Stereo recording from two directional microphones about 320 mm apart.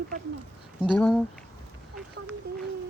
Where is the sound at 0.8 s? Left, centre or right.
Centre.